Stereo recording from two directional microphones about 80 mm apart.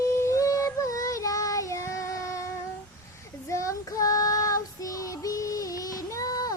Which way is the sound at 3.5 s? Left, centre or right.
Left.